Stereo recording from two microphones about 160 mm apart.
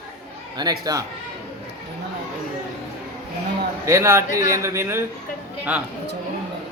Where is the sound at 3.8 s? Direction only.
20° right (ahead or behind).